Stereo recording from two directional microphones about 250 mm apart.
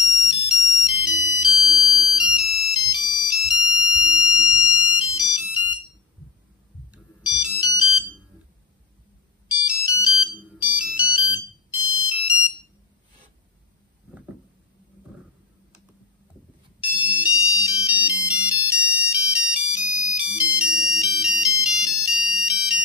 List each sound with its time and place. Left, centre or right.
0.1 s ringtone: centre
6.9 s ringtone: centre
9.5 s ringtone: centre
10.2 s music: centre
16.8 s ringtone: centre